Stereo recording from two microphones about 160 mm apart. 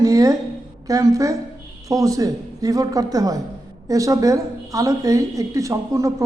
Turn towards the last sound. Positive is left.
turn(degrees=-20)  # may be behind; listen again after turning